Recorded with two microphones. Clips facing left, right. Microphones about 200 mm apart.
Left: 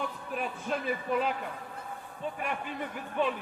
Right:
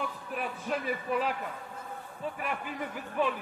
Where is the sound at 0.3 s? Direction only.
Centre (ahead or behind).